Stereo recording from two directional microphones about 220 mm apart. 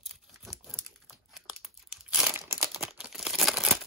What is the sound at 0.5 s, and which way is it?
Crumpling, centre (ahead or behind).